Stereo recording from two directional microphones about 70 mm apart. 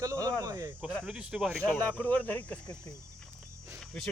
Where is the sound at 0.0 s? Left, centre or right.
Right.